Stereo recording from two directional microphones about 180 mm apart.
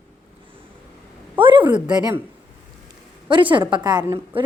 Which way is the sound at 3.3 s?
25° right (ahead or behind).